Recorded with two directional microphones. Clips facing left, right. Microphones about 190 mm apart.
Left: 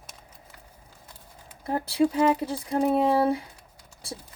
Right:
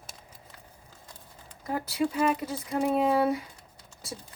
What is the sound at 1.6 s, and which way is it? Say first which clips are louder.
Speech: left 5 dB; 30° left (ahead or behind).